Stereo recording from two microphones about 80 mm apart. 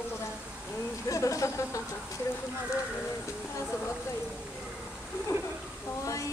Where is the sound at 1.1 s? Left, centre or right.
Left.